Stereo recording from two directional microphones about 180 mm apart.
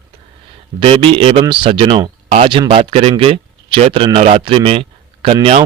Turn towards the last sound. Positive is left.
turn(degrees=-30)  # may be behind; listen again after turning